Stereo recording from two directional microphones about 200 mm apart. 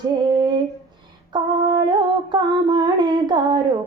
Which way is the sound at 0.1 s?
20° right (ahead or behind).